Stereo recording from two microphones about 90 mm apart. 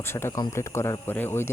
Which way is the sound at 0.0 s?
25° left (ahead or behind).